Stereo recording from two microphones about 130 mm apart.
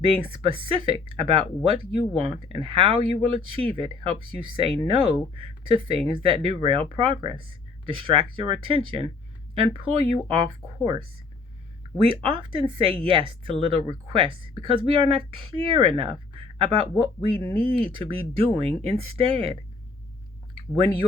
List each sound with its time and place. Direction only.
0.0 s speech: 45° right (ahead or behind)
12.2 s speech: 40° right (ahead or behind)
20.6 s speech: 40° right (ahead or behind)